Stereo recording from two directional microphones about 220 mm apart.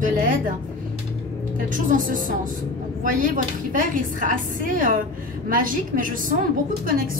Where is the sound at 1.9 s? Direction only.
35° right (ahead or behind).